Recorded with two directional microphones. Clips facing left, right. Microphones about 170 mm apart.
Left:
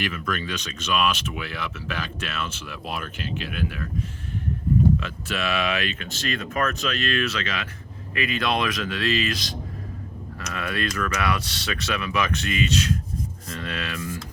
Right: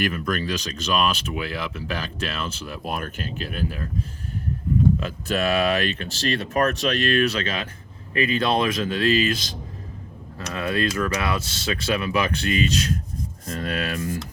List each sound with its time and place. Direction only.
0.0 s speech: 40° right (ahead or behind)
4.9 s speech: 40° right (ahead or behind)
10.5 s speech: 30° right (ahead or behind)